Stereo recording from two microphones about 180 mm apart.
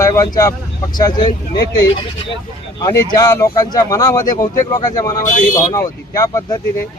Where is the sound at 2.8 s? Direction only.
20° left (ahead or behind).